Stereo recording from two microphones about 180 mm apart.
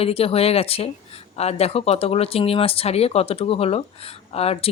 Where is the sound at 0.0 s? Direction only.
35° left (ahead or behind).